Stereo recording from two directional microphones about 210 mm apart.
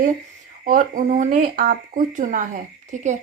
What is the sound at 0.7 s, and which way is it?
Speech, 40° right (ahead or behind).